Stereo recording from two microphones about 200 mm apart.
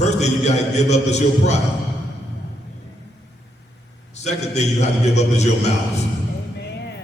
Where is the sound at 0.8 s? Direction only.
35° left (ahead or behind).